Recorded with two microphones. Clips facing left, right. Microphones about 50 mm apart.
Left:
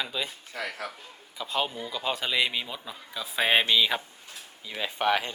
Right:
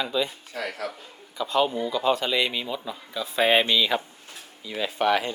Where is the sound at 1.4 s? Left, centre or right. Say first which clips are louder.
Right 7 dB; centre.